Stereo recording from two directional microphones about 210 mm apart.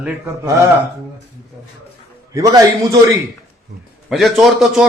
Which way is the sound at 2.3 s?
15° right (ahead or behind).